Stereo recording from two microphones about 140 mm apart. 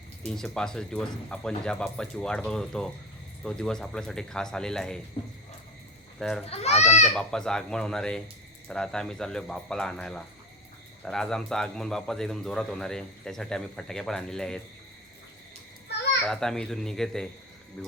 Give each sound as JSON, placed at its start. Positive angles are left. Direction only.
{"t": 0.3, "sound": "speech", "side_deg": 5}
{"t": 5.2, "sound": "speech", "side_deg": 35}
{"t": 6.1, "sound": "speech", "side_deg": 5}
{"t": 6.5, "sound": "a child's voice", "side_deg": 50}
{"t": 7.1, "sound": "speech", "side_deg": 5}
{"t": 16.2, "sound": "speech", "side_deg": 5}